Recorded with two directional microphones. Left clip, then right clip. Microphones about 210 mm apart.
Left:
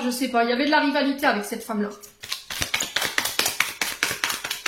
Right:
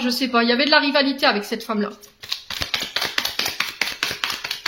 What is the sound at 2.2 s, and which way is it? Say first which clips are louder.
Tap: right 2 dB; 30° right (ahead or behind).